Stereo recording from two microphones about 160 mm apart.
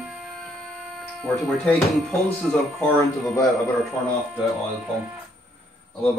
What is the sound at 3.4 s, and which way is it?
Speech, centre (ahead or behind).